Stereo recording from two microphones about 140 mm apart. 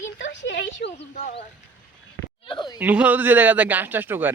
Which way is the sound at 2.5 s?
35° left (ahead or behind).